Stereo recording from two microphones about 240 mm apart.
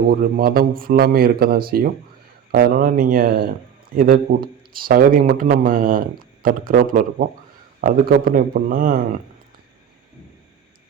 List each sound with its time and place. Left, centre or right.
0.1 s a man's voice: right